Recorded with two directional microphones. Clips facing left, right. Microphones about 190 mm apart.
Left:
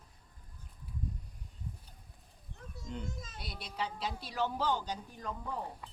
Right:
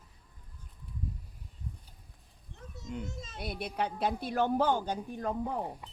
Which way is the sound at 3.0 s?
25° right (ahead or behind).